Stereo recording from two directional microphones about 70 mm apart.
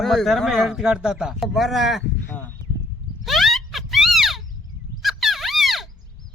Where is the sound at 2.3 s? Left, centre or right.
Left.